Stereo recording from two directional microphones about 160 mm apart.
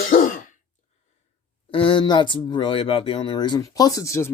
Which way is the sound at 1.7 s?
30° left (ahead or behind).